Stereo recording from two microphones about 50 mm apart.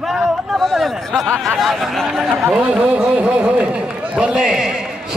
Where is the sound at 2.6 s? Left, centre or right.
Right.